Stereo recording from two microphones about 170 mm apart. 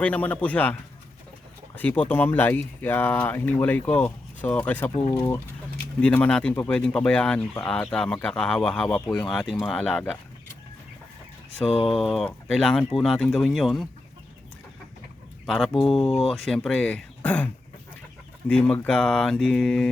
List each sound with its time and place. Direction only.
0.0 s speech: 10° left (ahead or behind)
5.0 s speech: 30° left (ahead or behind)
6.0 s speech: 10° left (ahead or behind)
9.2 s speech: centre (ahead or behind)
11.7 s speech: 35° left (ahead or behind)
11.9 s speech: centre (ahead or behind)
15.4 s speech: centre (ahead or behind)